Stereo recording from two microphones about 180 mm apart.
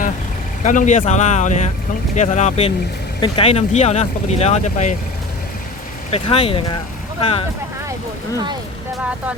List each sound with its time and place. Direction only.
0.6 s speech: 45° left (ahead or behind)
6.1 s speech: 35° left (ahead or behind)